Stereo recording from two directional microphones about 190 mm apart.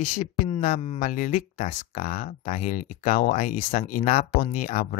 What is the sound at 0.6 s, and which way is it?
Speech, 40° left (ahead or behind).